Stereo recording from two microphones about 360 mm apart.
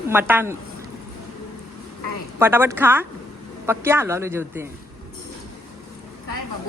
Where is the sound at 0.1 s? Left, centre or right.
Centre.